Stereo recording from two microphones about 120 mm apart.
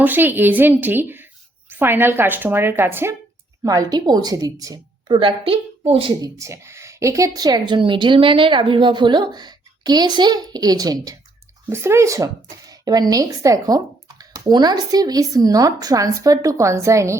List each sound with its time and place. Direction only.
0.0 s a woman's voice: 15° right (ahead or behind); by 5.3 s 40° right (ahead or behind)
5.4 s speech: 55° right (ahead or behind)
6.2 s speech: 25° right (ahead or behind)